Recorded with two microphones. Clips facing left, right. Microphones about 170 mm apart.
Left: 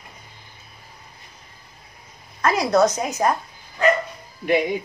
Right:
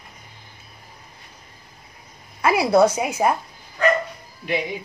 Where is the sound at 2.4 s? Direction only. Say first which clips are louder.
Right 2 dB; 10° right (ahead or behind).